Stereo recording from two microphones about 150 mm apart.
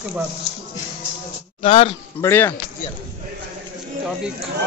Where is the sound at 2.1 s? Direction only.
15° left (ahead or behind).